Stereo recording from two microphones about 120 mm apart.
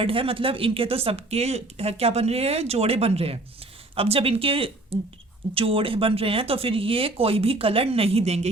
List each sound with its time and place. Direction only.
0.0 s speech: 50° right (ahead or behind)